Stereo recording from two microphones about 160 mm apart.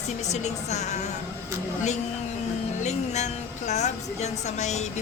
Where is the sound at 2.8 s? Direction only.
45° left (ahead or behind).